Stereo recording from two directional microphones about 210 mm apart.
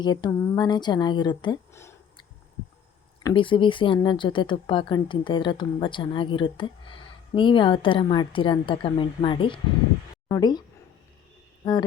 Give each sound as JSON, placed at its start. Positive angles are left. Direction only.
{"t": 0.0, "sound": "a woman's voice", "side_deg": 20}
{"t": 3.2, "sound": "speech", "side_deg": 25}
{"t": 11.6, "sound": "speech", "side_deg": 20}